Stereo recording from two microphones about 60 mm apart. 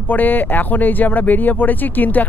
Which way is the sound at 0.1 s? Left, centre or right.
Left.